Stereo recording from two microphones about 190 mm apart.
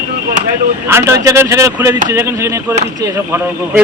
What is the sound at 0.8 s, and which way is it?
A man's voice, 15° right (ahead or behind).